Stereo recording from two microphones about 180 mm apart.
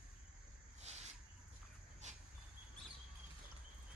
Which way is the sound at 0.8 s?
35° right (ahead or behind).